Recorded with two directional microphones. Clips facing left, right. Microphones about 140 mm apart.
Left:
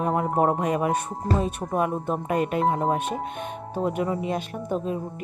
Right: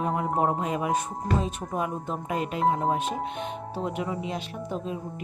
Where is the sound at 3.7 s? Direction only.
50° left (ahead or behind).